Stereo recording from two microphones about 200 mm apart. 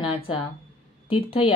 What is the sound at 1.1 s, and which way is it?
Speech, 25° left (ahead or behind).